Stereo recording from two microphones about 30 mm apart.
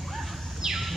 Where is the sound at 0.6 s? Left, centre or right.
Right.